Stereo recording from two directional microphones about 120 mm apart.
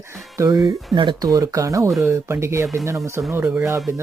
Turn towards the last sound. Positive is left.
turn(degrees=-15)  # may be behind; listen again after turning